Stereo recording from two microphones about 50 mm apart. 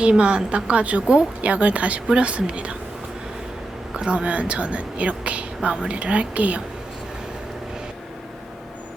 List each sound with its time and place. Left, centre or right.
0.0 s speech: right
3.9 s speech: right